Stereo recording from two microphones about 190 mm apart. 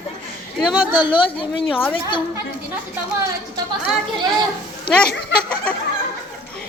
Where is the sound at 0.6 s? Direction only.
5° right (ahead or behind).